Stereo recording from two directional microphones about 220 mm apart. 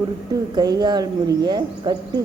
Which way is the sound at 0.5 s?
20° right (ahead or behind).